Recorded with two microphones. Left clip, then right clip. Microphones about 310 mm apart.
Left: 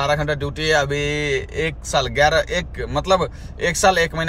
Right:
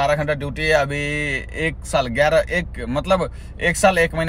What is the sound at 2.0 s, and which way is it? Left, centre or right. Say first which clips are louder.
Speech: even; centre.